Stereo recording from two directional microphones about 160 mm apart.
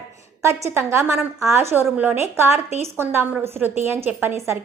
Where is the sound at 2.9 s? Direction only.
15° right (ahead or behind).